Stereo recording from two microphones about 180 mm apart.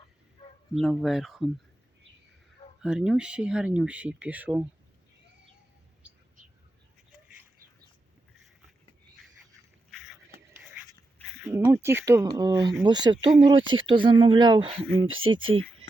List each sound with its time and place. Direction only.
0.8 s speech: centre (ahead or behind)
2.8 s speech: 5° right (ahead or behind)
11.4 s speech: 15° right (ahead or behind)
15.0 s speech: 90° right